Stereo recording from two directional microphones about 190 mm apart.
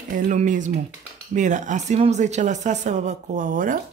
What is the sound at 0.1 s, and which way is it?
Speech, 40° right (ahead or behind).